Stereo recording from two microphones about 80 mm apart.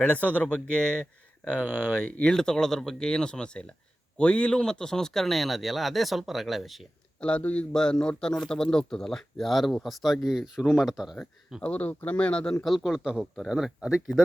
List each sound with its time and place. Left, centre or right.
0.0 s speech: centre
1.6 s speech: right
2.0 s a man's voice: centre
7.2 s a man's voice: centre
11.6 s speech: centre
12.6 s a man's voice: centre